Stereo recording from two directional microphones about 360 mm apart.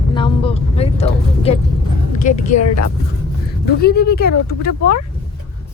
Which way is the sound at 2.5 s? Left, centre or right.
Left.